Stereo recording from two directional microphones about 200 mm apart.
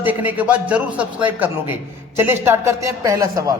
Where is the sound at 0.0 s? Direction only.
10° right (ahead or behind).